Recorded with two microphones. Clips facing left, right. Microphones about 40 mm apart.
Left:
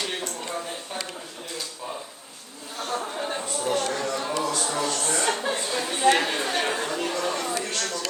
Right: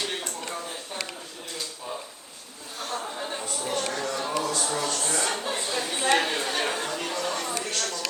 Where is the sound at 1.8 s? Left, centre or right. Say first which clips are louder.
Left 1 dB; left.